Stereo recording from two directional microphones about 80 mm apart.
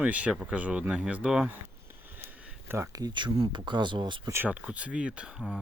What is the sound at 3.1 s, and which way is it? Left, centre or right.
Speech, right.